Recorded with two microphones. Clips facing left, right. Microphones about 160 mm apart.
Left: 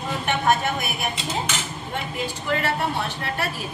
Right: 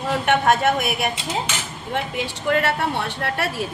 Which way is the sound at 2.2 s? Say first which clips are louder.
Right 4 dB; 70° right (ahead or behind).